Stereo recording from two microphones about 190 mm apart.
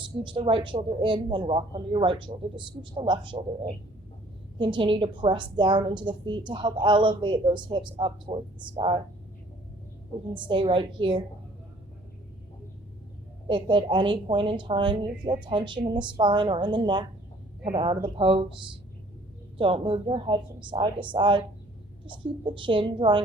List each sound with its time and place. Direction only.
0.2 s speech: 25° right (ahead or behind)
10.3 s speech: 25° right (ahead or behind)
13.5 s speech: 25° right (ahead or behind)
19.5 s speech: 25° right (ahead or behind)